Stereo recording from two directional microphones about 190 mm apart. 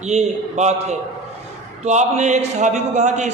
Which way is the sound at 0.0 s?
35° right (ahead or behind).